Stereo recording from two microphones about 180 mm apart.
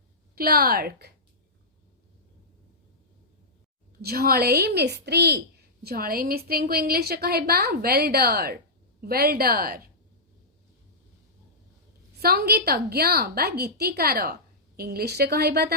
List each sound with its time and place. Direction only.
0.3 s a woman's voice: 55° right (ahead or behind)
4.0 s a woman's voice: 60° right (ahead or behind)
12.2 s a woman's voice: 60° right (ahead or behind)